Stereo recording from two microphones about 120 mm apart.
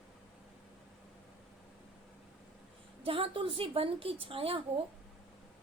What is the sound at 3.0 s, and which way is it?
A woman's voice, 50° right (ahead or behind).